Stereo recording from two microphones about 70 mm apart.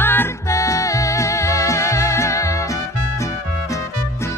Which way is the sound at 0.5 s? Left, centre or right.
Left.